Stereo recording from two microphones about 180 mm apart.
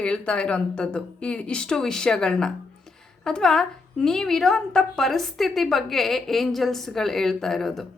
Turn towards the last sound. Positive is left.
turn(degrees=0)  # may be behind; listen again after turning